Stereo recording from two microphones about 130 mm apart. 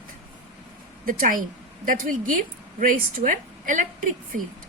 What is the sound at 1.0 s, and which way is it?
Speech, 90° right.